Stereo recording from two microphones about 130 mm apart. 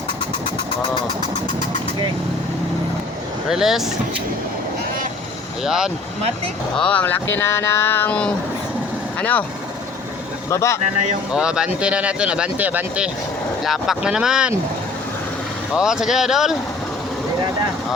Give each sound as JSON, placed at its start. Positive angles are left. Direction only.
{"t": 3.5, "sound": "speech", "side_deg": -5}
{"t": 5.6, "sound": "speech", "side_deg": -5}
{"t": 6.7, "sound": "speech", "side_deg": 10}
{"t": 10.5, "sound": "speech", "side_deg": 20}
{"t": 11.3, "sound": "speech", "side_deg": -5}
{"t": 15.7, "sound": "speech", "side_deg": -5}